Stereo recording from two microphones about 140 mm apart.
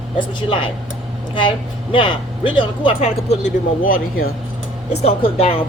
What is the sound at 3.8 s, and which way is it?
Speech, 90° left.